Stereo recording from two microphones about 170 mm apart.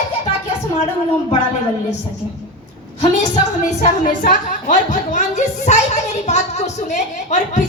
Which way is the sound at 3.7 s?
45° left (ahead or behind).